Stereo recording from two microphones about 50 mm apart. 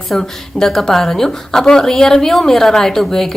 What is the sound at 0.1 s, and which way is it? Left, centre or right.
A woman's voice, centre.